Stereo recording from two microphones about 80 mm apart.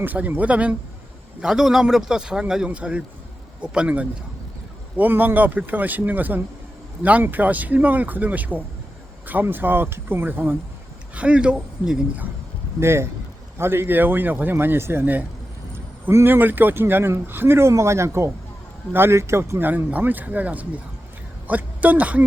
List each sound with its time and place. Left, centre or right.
0.0 s a man's voice: right
12.8 s a man's voice: right